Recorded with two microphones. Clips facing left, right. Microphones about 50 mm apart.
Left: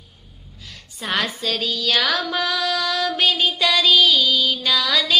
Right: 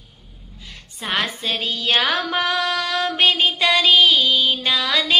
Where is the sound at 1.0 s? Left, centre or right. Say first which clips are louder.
Even; right.